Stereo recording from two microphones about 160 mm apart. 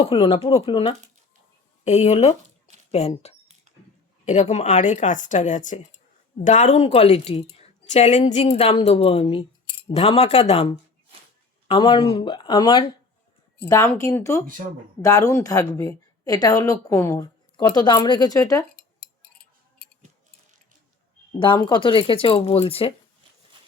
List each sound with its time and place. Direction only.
0.0 s speech: 35° left (ahead or behind)
1.8 s speech: 45° left (ahead or behind)
4.3 s a woman's voice: 45° left (ahead or behind); by 12.8 s 30° left (ahead or behind)
13.7 s a woman's voice: 20° left (ahead or behind)
21.3 s speech: 30° left (ahead or behind)